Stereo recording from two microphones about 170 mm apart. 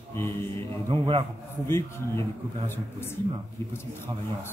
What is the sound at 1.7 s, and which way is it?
A man's voice, 15° left (ahead or behind).